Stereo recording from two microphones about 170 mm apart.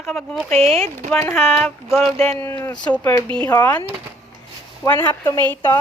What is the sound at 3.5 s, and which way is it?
Speech, 10° left (ahead or behind).